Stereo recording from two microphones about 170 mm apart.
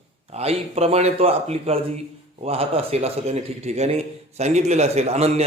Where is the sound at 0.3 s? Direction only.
35° right (ahead or behind).